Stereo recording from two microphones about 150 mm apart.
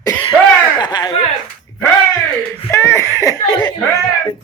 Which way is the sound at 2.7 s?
20° left (ahead or behind).